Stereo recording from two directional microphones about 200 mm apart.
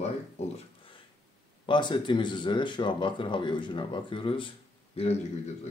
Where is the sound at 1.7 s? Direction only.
25° left (ahead or behind).